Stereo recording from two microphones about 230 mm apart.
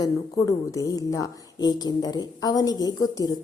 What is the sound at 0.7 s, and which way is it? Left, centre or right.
A woman's voice, centre.